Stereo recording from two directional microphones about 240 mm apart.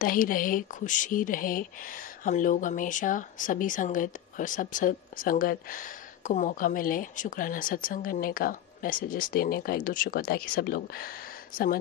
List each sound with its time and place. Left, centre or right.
0.0 s speech: left